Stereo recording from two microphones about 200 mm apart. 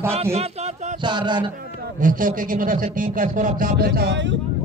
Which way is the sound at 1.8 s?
40° right (ahead or behind).